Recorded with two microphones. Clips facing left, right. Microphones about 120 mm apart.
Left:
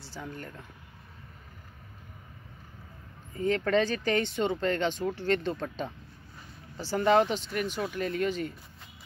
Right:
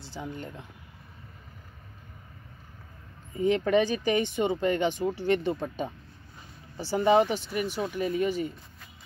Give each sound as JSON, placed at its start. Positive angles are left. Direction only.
{"t": 0.0, "sound": "speech", "side_deg": -20}
{"t": 3.3, "sound": "speech", "side_deg": -15}